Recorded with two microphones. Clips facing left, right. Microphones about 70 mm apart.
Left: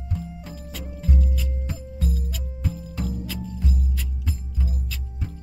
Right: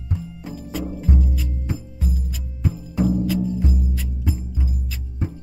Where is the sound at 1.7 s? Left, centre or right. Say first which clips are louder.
Right 2 dB; centre.